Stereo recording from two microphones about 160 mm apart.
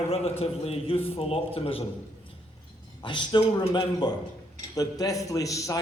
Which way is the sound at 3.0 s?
30° left (ahead or behind).